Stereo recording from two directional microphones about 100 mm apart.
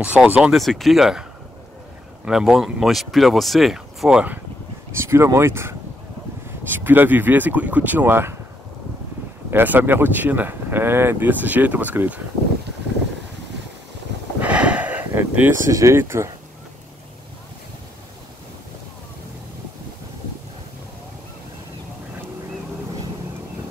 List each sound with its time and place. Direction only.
0.0 s speech: 15° right (ahead or behind)
2.2 s speech: 5° right (ahead or behind)
4.9 s speech: 25° right (ahead or behind)
6.8 s speech: 20° right (ahead or behind)
9.5 s speech: 20° right (ahead or behind)
14.4 s a sound: 10° right (ahead or behind)
15.7 s speech: 30° right (ahead or behind)